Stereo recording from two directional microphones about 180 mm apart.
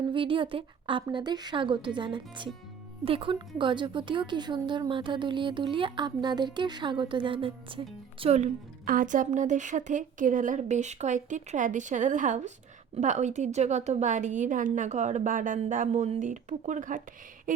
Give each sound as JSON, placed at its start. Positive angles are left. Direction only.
{"t": 0.1, "sound": "speech", "side_deg": -30}
{"t": 8.8, "sound": "a woman's voice", "side_deg": -50}